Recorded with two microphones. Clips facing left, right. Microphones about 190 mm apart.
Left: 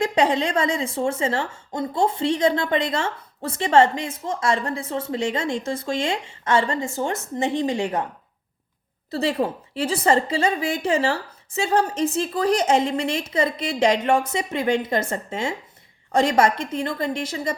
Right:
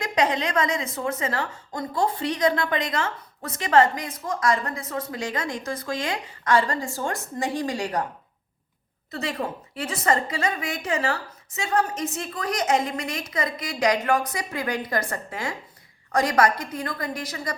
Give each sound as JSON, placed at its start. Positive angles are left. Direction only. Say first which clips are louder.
{"t": 0.0, "sound": "a woman's voice", "louder": "left 4 dB", "side_deg": 30}
{"t": 9.0, "sound": "a woman's voice", "louder": "left 6 dB", "side_deg": 30}